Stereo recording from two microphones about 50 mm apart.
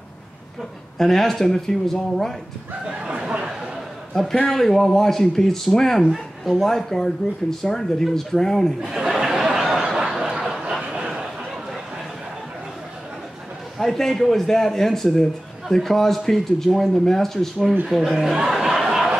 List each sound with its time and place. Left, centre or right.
0.9 s speech: centre
2.9 s chatter: centre
4.1 s a man's voice: centre
8.8 s a sound: centre
9.6 s snicker: centre
10.6 s a sound: centre
13.7 s speech: centre
18.1 s crowd: centre